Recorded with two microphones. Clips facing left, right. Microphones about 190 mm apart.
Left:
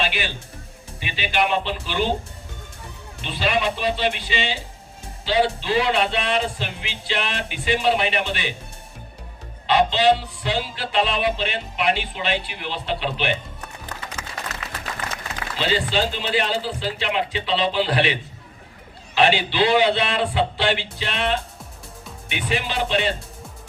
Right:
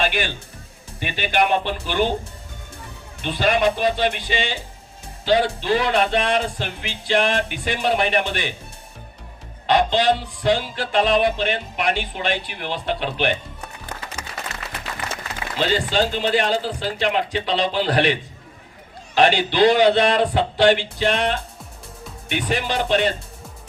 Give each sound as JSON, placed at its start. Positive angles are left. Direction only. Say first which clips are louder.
{"t": 0.0, "sound": "a man's voice", "louder": "right 3 dB", "side_deg": -50}
{"t": 3.2, "sound": "a man's voice", "louder": "right 4 dB", "side_deg": -50}
{"t": 9.6, "sound": "a man's voice", "louder": "even", "side_deg": -45}
{"t": 15.5, "sound": "a man's voice", "louder": "right 2 dB", "side_deg": -45}